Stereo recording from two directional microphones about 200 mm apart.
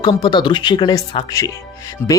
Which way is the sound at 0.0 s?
20° left (ahead or behind).